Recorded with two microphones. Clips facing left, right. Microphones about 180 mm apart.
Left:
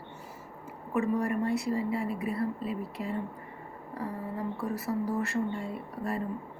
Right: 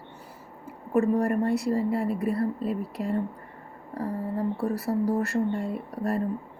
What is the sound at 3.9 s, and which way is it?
Speech, 35° right (ahead or behind).